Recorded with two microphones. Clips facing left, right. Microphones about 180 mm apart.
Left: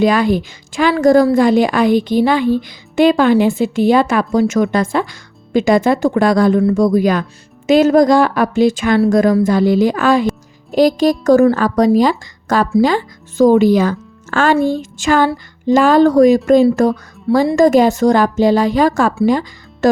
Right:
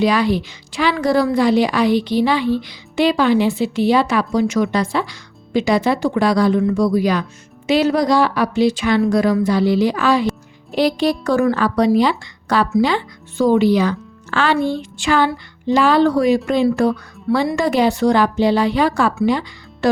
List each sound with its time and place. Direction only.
0.0 s a woman's voice: 50° left (ahead or behind)